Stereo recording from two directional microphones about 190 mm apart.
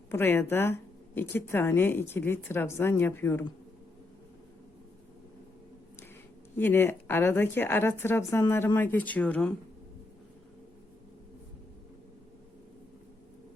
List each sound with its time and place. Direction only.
0.1 s speech: 10° left (ahead or behind)
6.6 s speech: 10° left (ahead or behind)